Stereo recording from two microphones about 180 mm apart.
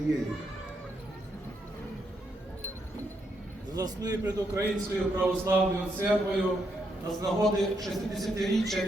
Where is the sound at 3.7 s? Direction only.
20° right (ahead or behind).